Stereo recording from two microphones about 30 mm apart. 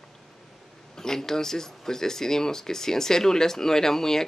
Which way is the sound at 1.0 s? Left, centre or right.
Centre.